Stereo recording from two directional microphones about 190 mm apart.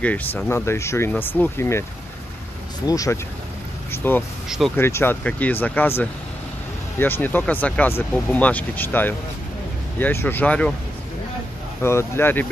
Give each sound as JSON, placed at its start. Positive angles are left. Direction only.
{"t": 0.0, "sound": "speech", "side_deg": 10}
{"t": 2.9, "sound": "speech", "side_deg": 20}
{"t": 4.5, "sound": "speech", "side_deg": 0}
{"t": 4.7, "sound": "speech", "side_deg": 10}
{"t": 11.8, "sound": "speech", "side_deg": 15}